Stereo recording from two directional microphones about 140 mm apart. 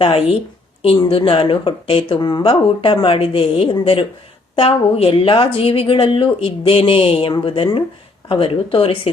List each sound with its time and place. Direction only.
0.0 s speech: 45° left (ahead or behind)